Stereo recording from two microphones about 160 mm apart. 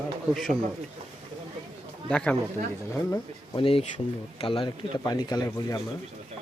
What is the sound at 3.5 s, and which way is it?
Speech, 35° left (ahead or behind).